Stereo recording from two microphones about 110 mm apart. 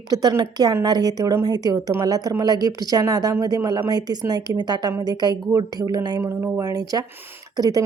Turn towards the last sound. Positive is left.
turn(degrees=-35)  # may be behind; listen again after turning